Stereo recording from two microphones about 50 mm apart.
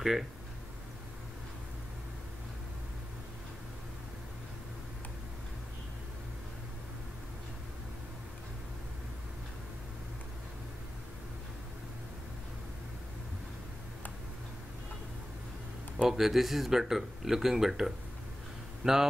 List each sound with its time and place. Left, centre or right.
16.1 s speech: centre